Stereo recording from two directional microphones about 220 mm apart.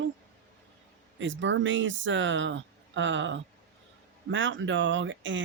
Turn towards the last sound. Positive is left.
turn(degrees=-60)  # may be behind; listen again after turning